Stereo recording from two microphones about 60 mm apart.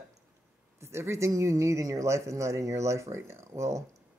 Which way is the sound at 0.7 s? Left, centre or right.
Right.